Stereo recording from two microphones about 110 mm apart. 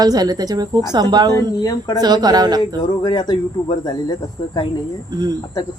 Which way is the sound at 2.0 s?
40° right (ahead or behind).